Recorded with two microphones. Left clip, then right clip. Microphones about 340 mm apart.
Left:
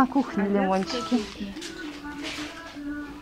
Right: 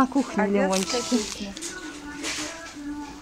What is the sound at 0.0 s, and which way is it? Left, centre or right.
Speech, centre.